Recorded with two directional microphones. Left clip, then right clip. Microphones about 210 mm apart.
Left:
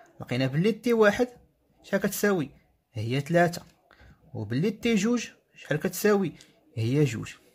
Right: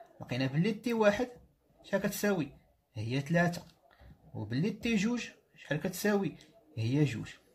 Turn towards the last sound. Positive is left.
turn(degrees=45)  # may be behind; listen again after turning